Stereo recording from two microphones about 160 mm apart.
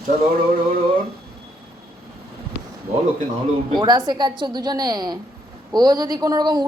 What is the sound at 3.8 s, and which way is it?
A woman's voice, 25° right (ahead or behind).